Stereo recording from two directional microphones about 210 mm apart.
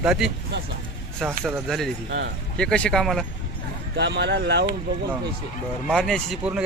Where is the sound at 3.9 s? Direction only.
55° right (ahead or behind).